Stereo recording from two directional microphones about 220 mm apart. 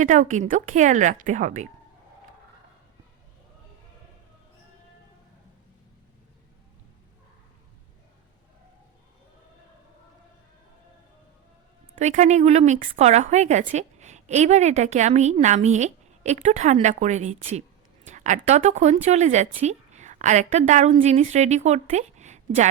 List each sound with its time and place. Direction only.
0.0 s a woman's voice: 35° right (ahead or behind)
11.9 s a woman's voice: 35° right (ahead or behind)